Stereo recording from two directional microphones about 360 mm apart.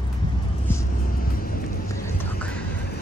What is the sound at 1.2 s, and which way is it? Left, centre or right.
Vehicle, left.